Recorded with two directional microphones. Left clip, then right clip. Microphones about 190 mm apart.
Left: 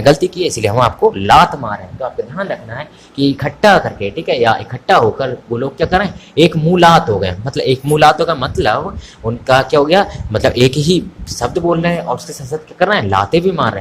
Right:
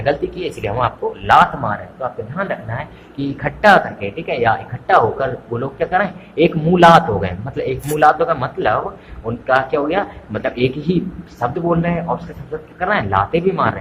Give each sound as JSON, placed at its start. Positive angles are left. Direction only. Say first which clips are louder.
{"t": 0.0, "sound": "speech", "louder": "left 8 dB", "side_deg": 60}
{"t": 0.3, "sound": "speech", "louder": "left 7 dB", "side_deg": 45}
{"t": 1.6, "sound": "speech", "louder": "left 1 dB", "side_deg": 45}